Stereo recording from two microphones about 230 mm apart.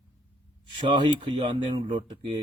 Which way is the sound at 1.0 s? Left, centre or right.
Right.